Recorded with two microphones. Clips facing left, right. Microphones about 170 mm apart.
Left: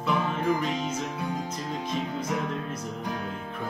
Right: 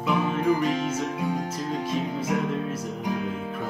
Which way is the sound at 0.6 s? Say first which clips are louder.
Right 4 dB; 5° right (ahead or behind).